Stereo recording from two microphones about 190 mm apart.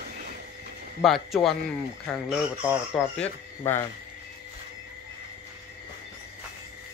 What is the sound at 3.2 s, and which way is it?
Speech, 10° left (ahead or behind).